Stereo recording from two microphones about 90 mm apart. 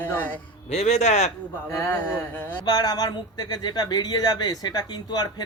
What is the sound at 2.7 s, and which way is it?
Speech, 50° left (ahead or behind).